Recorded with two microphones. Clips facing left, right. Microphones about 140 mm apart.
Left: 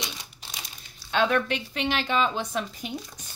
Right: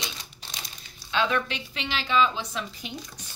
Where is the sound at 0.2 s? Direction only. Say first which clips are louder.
Even; 10° left (ahead or behind).